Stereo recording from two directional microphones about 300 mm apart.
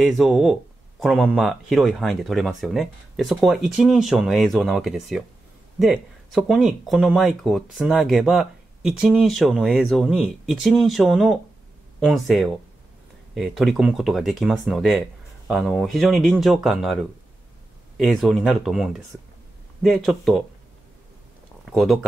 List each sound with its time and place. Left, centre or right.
0.0 s speech: centre
21.6 s speech: centre